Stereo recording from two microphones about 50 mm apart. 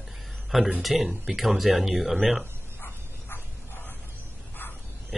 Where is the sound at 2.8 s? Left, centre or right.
Left.